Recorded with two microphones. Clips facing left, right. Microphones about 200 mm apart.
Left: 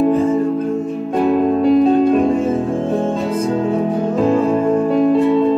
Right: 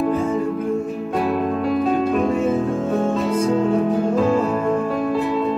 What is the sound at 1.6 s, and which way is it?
Music, centre (ahead or behind).